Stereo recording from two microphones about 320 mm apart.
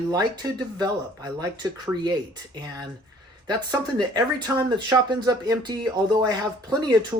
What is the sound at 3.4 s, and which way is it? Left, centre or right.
Speech, centre.